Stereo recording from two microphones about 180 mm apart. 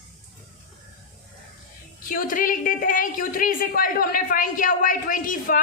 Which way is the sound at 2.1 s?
50° left (ahead or behind).